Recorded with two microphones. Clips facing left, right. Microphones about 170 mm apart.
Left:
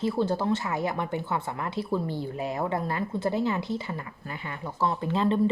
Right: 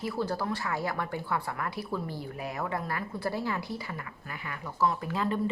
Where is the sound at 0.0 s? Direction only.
25° left (ahead or behind).